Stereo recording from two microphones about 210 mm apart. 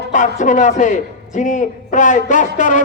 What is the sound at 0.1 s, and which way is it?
A man's voice, 35° left (ahead or behind).